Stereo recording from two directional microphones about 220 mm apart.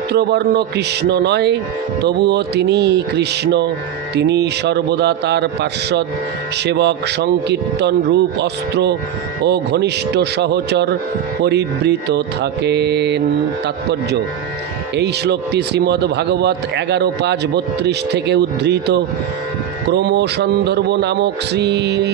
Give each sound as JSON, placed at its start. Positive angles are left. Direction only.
{"t": 0.1, "sound": "speech", "side_deg": -50}
{"t": 15.0, "sound": "speech", "side_deg": -50}